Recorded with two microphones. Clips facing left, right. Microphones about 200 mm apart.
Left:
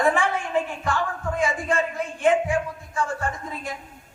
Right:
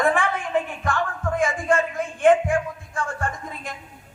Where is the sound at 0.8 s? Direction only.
50° right (ahead or behind).